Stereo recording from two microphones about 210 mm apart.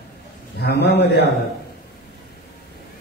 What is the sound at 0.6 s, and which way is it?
Speech, 50° left (ahead or behind).